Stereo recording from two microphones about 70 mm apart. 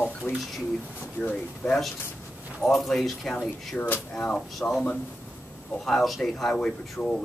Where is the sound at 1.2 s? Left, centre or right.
Centre.